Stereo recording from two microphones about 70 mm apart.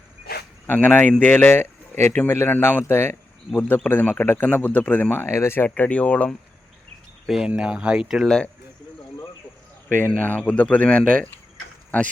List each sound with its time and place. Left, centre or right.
0.7 s speech: left
7.3 s speech: centre
10.2 s speech: left